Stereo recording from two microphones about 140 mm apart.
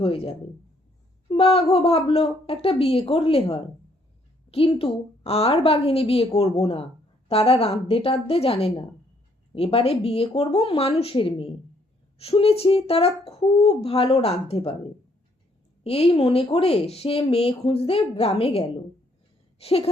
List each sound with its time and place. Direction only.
0.0 s speech: 40° left (ahead or behind)
15.8 s speech: 45° left (ahead or behind)